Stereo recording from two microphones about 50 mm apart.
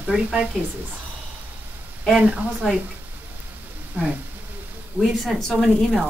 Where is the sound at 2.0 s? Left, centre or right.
Centre.